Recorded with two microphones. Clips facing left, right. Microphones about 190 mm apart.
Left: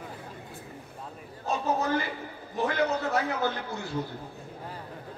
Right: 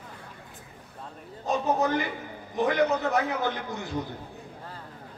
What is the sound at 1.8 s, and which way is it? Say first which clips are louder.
A man's voice: right 2 dB; 20° right (ahead or behind).